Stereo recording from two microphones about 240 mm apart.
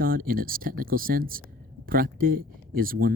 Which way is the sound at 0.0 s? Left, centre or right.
Right.